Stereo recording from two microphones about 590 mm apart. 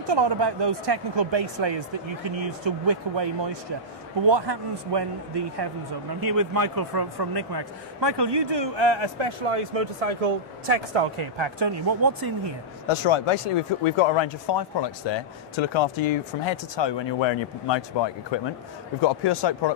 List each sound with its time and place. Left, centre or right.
0.1 s a man's voice: right
4.3 s a man's voice: right
12.8 s speech: left